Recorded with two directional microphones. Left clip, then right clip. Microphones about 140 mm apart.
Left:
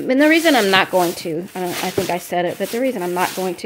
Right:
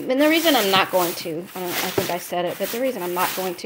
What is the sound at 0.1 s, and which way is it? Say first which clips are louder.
Speech: left 4 dB; 50° left (ahead or behind).